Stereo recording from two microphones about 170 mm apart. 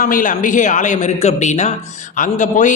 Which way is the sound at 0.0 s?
55° left (ahead or behind).